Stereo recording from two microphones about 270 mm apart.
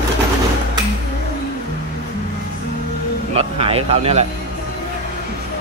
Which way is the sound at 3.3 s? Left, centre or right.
Right.